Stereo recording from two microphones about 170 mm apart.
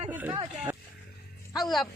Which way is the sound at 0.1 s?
10° right (ahead or behind).